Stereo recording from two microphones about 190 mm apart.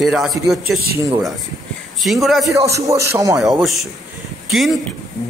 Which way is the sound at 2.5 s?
15° right (ahead or behind).